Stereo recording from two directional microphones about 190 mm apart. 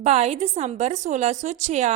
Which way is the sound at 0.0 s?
35° right (ahead or behind).